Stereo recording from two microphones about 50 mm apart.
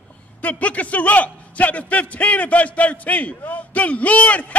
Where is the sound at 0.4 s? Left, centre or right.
Left.